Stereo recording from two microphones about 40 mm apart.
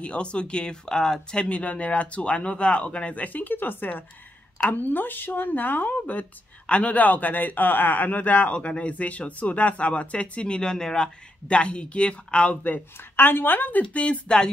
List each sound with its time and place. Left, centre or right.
0.0 s speech: left
1.5 s speech: left
3.4 s a man's voice: left
6.7 s a man's voice: left
12.6 s a man's voice: left
13.9 s speech: left